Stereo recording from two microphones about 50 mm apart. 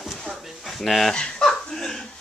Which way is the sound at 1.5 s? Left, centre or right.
Centre.